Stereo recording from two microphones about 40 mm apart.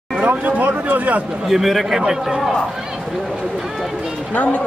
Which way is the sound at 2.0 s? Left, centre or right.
Centre.